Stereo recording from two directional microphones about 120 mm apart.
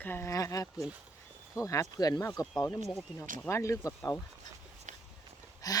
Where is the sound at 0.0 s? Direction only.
20° left (ahead or behind).